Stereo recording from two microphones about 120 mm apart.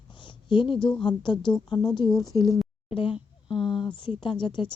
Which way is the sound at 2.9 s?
50° left (ahead or behind).